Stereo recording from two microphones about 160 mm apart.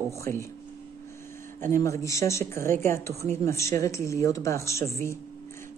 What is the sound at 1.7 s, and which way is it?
Speech, 20° left (ahead or behind).